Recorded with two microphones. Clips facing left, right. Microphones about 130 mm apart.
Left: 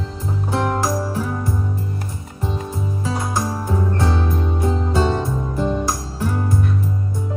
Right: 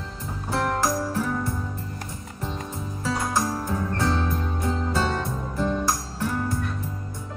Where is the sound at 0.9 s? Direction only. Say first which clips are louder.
Left 3 dB; 25° left (ahead or behind).